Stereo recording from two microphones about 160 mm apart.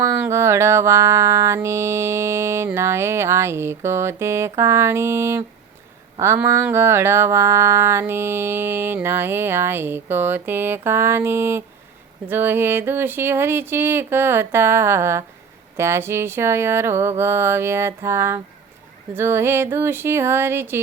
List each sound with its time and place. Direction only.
0.0 s music: 15° right (ahead or behind)